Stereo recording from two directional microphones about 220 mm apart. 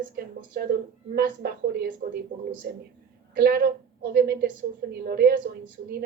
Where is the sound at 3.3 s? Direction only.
45° right (ahead or behind).